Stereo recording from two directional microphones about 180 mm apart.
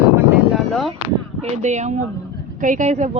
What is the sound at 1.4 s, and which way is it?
Speech, 40° right (ahead or behind).